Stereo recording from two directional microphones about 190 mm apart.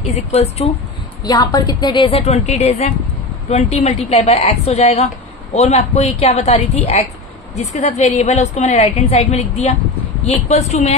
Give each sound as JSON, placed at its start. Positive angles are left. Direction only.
{"t": 0.0, "sound": "a woman's voice", "side_deg": 35}
{"t": 1.2, "sound": "a woman's voice", "side_deg": 20}